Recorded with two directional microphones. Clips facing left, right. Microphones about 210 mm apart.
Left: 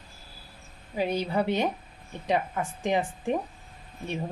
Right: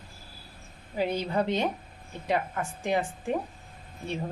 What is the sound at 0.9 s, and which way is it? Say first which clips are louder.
Speech: left 1 dB; 15° left (ahead or behind).